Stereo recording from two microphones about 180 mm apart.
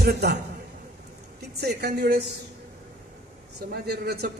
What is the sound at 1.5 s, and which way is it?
Speech, 65° right (ahead or behind).